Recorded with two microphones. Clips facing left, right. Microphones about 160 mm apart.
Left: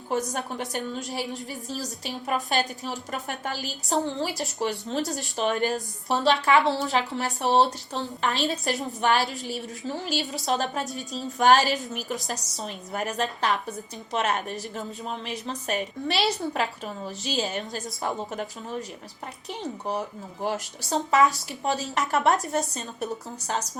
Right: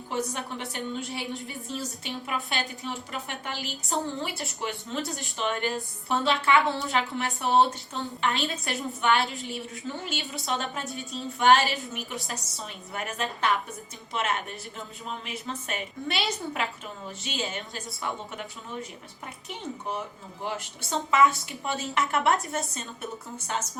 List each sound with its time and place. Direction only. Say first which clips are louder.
0.1 s a woman's voice: left 3 dB; 40° left (ahead or behind)